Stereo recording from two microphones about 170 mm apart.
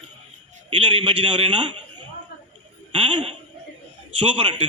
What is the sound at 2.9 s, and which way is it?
A man's voice, 35° right (ahead or behind).